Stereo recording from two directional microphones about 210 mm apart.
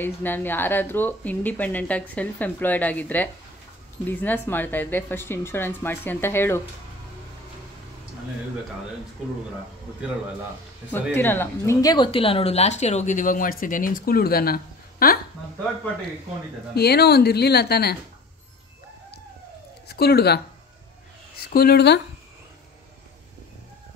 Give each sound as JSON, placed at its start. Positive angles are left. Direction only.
{"t": 0.0, "sound": "speech", "side_deg": 10}
{"t": 11.1, "sound": "speech", "side_deg": 10}
{"t": 16.7, "sound": "speech", "side_deg": 50}
{"t": 19.9, "sound": "speech", "side_deg": 50}
{"t": 21.5, "sound": "speech", "side_deg": 45}